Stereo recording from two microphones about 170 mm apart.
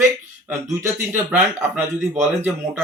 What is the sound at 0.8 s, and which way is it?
Speech, 15° right (ahead or behind).